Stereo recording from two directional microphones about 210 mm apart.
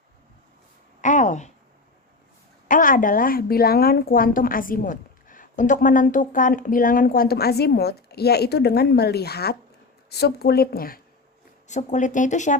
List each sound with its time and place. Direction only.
1.0 s a sound: 35° left (ahead or behind)
2.6 s a woman's voice: 40° left (ahead or behind)
11.7 s speech: 35° left (ahead or behind)